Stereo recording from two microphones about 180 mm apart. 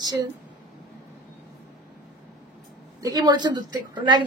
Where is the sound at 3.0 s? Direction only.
20° right (ahead or behind).